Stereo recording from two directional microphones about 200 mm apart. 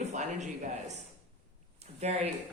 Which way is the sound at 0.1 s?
35° right (ahead or behind).